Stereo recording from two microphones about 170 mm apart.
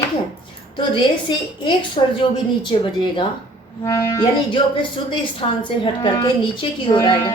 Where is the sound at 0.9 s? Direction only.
30° left (ahead or behind).